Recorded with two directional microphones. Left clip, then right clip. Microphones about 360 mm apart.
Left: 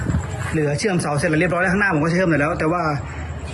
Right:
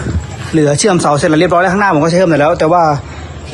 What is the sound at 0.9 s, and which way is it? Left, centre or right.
Speech, right.